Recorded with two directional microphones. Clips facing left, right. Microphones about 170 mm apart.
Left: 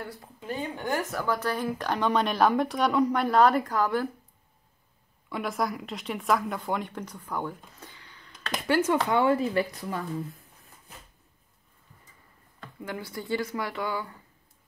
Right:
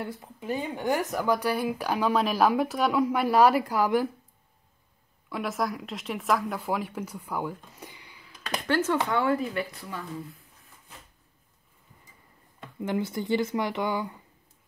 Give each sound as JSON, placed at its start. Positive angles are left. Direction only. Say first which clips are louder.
{"t": 0.0, "sound": "speech", "louder": "right 4 dB", "side_deg": -15}
{"t": 5.3, "sound": "speech", "louder": "even", "side_deg": 0}
{"t": 8.6, "sound": "speech", "louder": "left 2 dB", "side_deg": 15}
{"t": 9.5, "sound": "a woman's voice", "louder": "left 5 dB", "side_deg": 40}
{"t": 12.8, "sound": "speech", "louder": "right 7 dB", "side_deg": -20}